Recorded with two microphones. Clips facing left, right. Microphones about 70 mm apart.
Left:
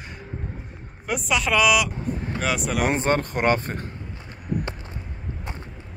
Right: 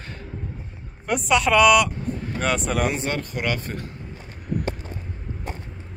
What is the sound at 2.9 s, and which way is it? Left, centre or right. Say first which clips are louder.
Speech: left 5 dB; left.